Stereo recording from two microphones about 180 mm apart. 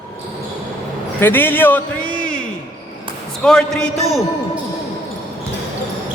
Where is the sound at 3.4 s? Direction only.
5° left (ahead or behind).